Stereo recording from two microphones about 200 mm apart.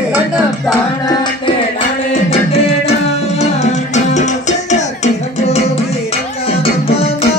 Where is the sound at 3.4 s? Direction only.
35° left (ahead or behind).